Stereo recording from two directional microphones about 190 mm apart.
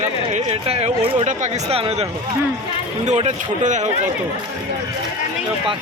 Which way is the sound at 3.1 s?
35° right (ahead or behind).